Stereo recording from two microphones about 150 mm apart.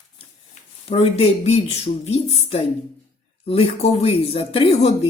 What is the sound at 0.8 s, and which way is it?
Speech, 40° left (ahead or behind).